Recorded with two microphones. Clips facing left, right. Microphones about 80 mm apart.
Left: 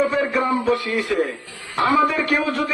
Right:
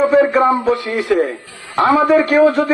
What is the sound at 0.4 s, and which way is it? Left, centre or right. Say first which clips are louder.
A man's voice: right 5 dB; right.